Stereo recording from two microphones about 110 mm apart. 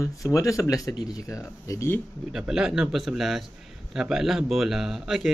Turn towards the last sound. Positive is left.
turn(degrees=-5)  # may be behind; listen again after turning